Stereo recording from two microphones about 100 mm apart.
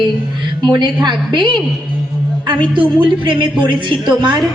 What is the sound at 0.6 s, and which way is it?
A woman's voice, 50° right (ahead or behind).